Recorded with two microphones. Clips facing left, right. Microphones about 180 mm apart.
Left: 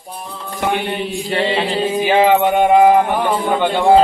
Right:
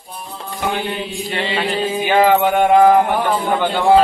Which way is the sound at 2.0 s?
25° left (ahead or behind).